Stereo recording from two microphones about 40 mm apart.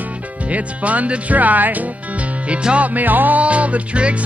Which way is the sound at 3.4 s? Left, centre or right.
Right.